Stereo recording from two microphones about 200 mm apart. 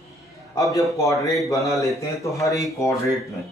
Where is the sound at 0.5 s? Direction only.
15° left (ahead or behind).